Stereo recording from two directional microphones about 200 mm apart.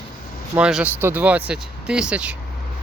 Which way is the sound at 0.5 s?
5° right (ahead or behind).